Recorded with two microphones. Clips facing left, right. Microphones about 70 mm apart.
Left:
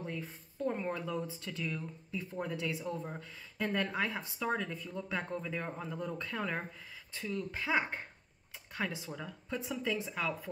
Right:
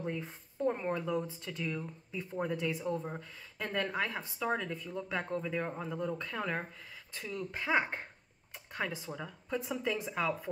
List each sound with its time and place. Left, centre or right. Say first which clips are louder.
0.0 s speech: right 3 dB; right
0.7 s speech: right 3 dB; centre
2.8 s speech: right 3 dB; centre